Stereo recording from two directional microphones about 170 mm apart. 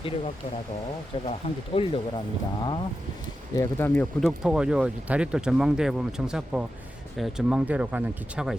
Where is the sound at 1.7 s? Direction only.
35° left (ahead or behind).